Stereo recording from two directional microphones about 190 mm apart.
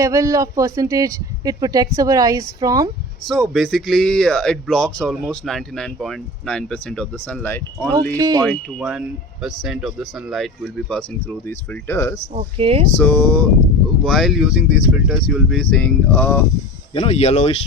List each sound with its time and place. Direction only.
0.0 s speech: 15° right (ahead or behind)
3.5 s speech: centre (ahead or behind)
8.1 s speech: 20° right (ahead or behind)
8.4 s speech: 5° right (ahead or behind); by 12.1 s 10° left (ahead or behind)
12.3 s speech: 35° right (ahead or behind)
13.0 s speech: 10° left (ahead or behind)
16.9 s speech: 30° left (ahead or behind)